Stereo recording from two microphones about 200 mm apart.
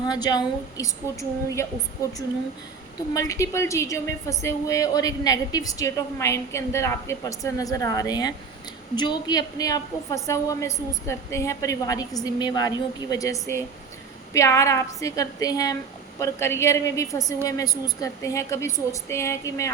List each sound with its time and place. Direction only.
0.0 s a woman's voice: 20° left (ahead or behind)
3.1 s a woman's voice: 15° left (ahead or behind)